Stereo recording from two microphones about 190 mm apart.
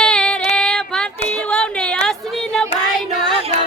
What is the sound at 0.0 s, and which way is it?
Female singing, 5° left (ahead or behind).